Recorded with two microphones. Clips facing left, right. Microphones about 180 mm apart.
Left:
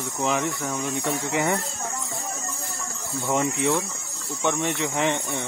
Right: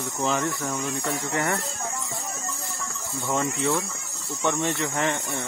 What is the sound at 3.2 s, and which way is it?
Speech, 10° left (ahead or behind).